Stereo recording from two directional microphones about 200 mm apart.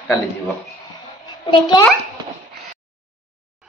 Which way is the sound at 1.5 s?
20° left (ahead or behind).